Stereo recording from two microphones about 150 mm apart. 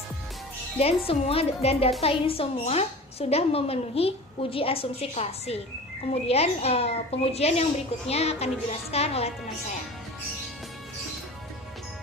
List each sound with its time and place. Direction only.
0.8 s a woman's voice: 40° left (ahead or behind)